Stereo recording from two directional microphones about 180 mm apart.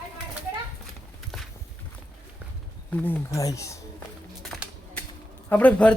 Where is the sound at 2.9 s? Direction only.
10° left (ahead or behind).